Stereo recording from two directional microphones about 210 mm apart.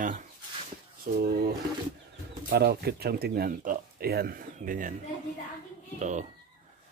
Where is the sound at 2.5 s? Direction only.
50° right (ahead or behind).